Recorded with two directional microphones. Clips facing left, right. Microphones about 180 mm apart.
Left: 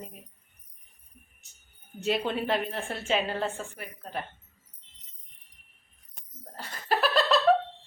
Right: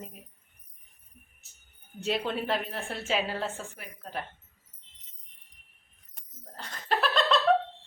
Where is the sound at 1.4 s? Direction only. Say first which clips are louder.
Left 1 dB; centre (ahead or behind).